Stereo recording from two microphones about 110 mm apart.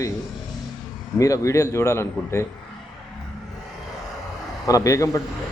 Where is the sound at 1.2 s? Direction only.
30° left (ahead or behind).